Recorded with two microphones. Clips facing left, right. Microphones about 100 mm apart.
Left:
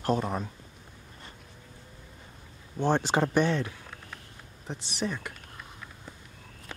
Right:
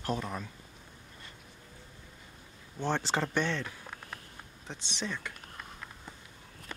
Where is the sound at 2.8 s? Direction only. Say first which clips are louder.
Left 6 dB; 15° left (ahead or behind).